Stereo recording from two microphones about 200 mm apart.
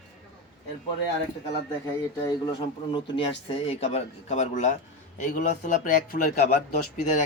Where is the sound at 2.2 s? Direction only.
20° left (ahead or behind); by 6.8 s 45° left (ahead or behind).